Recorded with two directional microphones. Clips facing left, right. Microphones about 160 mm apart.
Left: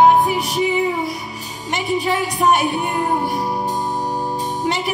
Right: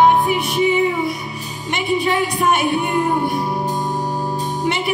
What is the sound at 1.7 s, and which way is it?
Speech, 40° left (ahead or behind).